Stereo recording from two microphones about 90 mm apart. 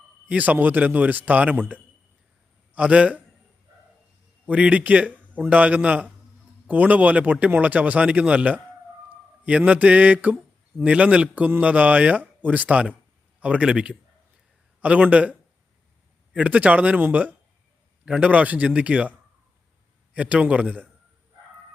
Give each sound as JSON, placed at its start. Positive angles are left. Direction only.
{"t": 0.3, "sound": "speech", "side_deg": -15}
{"t": 4.4, "sound": "speech", "side_deg": -15}
{"t": 20.1, "sound": "speech", "side_deg": -15}